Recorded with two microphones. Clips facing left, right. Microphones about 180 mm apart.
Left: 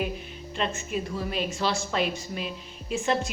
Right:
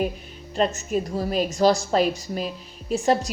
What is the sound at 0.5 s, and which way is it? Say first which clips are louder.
A woman's voice: right 7 dB; 40° right (ahead or behind).